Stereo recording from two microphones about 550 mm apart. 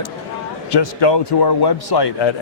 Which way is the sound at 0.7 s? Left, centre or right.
Left.